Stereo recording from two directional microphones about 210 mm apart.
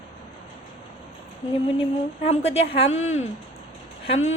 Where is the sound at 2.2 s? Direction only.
30° left (ahead or behind).